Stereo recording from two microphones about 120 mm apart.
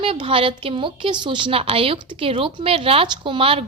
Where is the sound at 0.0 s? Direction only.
50° right (ahead or behind).